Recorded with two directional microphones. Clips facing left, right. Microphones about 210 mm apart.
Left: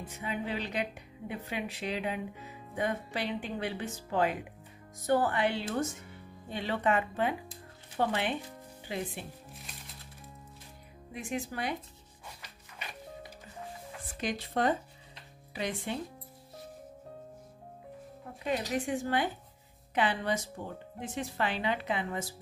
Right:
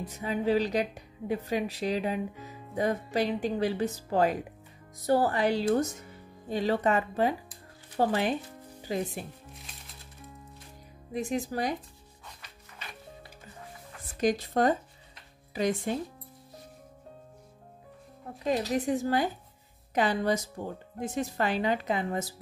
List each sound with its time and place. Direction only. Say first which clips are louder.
0.0 s speech: right 7 dB; 40° right (ahead or behind)
11.1 s speech: right 6 dB; 40° right (ahead or behind)
14.2 s speech: right 5 dB; 40° right (ahead or behind)
18.9 s speech: right 4 dB; 40° right (ahead or behind)